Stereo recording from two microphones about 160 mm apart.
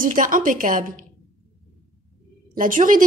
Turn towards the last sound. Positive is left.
turn(degrees=-60)  # may be behind; listen again after turning